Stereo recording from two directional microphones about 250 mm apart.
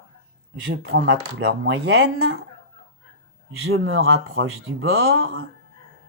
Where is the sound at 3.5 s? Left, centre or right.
Right.